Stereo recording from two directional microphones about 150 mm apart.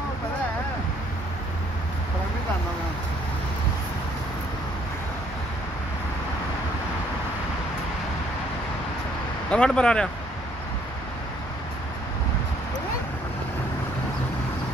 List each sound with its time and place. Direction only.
9.5 s speech: 5° left (ahead or behind)